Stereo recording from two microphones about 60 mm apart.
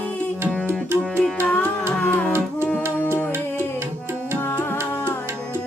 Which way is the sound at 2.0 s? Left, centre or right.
Left.